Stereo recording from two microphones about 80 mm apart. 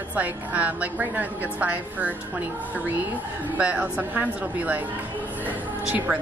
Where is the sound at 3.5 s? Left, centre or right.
Centre.